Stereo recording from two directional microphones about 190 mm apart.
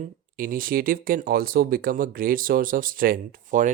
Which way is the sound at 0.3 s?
50° right (ahead or behind).